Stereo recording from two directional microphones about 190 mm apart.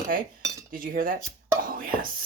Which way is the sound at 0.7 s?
45° right (ahead or behind).